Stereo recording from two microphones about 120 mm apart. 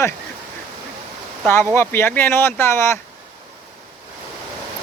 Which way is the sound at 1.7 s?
20° left (ahead or behind).